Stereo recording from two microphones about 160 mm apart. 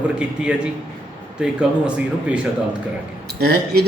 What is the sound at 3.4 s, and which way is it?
Speech, 90° right.